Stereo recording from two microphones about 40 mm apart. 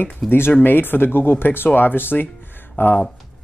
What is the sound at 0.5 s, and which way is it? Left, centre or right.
Speech, left.